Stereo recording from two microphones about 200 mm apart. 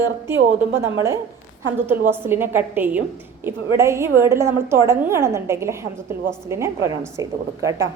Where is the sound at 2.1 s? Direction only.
10° right (ahead or behind).